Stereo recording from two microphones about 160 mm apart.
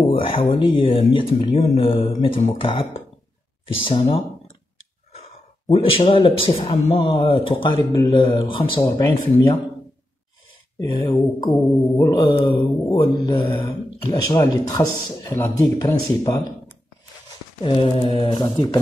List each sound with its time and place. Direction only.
0.4 s speech: 35° left (ahead or behind)
5.2 s speech: 35° left (ahead or behind)
7.9 s mantra: 25° left (ahead or behind)
10.8 s mantra: 25° left (ahead or behind)
17.6 s speech: 30° left (ahead or behind)